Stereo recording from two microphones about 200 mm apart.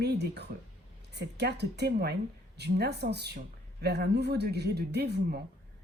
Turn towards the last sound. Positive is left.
turn(degrees=-55)  # may be behind; listen again after turning